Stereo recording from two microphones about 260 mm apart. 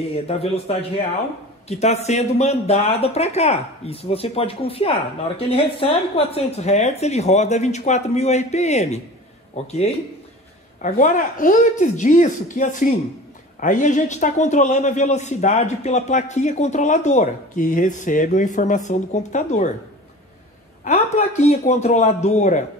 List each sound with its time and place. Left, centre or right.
0.1 s a man's voice: left
20.8 s a man's voice: left